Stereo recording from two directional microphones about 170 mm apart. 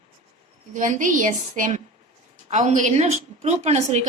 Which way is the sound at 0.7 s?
50° right (ahead or behind).